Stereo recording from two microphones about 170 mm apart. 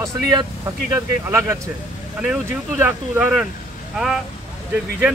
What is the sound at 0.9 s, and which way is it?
Speech, 15° right (ahead or behind).